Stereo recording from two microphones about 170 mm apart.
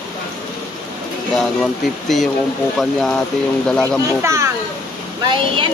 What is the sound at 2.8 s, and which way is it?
Speech, 5° left (ahead or behind).